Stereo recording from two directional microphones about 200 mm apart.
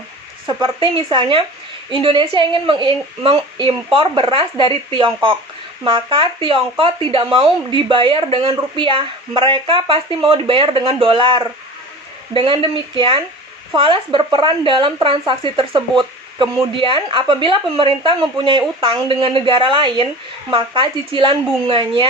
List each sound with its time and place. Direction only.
0.4 s speech: 25° right (ahead or behind)